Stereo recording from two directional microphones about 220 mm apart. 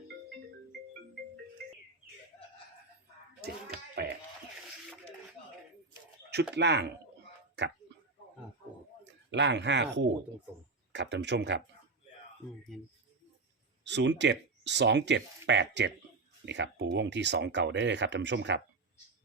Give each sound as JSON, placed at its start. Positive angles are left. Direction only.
{"t": 4.0, "sound": "a sound", "side_deg": -45}
{"t": 6.5, "sound": "speech", "side_deg": -50}
{"t": 9.3, "sound": "speech", "side_deg": -50}
{"t": 13.8, "sound": "speech", "side_deg": -50}